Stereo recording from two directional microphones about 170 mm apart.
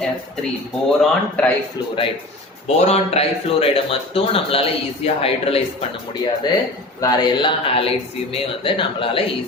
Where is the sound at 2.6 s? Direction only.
40° left (ahead or behind).